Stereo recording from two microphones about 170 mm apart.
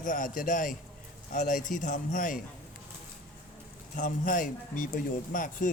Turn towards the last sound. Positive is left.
turn(degrees=50)  # may be behind; listen again after turning